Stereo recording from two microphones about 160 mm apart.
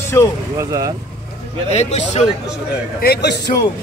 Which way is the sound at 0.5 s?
20° right (ahead or behind).